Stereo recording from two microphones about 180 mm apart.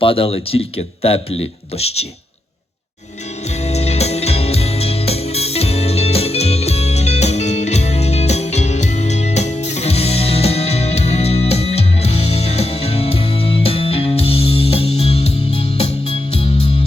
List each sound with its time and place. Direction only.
0.0 s speech: 30° left (ahead or behind)
3.5 s music: 35° left (ahead or behind)